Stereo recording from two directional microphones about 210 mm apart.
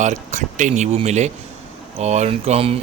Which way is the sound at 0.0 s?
35° right (ahead or behind).